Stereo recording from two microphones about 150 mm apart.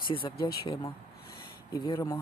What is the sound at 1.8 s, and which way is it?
Speech, 25° left (ahead or behind).